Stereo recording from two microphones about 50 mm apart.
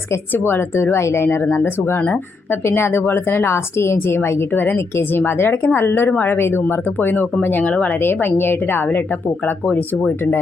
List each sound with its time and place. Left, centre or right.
0.3 s a woman's voice: left
6.1 s speech: left
6.3 s a woman's voice: left
7.9 s a woman's voice: left